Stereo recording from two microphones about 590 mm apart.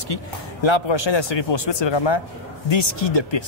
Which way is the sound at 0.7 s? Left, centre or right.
Left.